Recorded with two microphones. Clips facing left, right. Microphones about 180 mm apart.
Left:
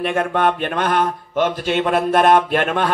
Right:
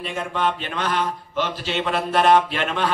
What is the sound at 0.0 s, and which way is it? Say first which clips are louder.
A man's voice: left 6 dB; 60° left (ahead or behind).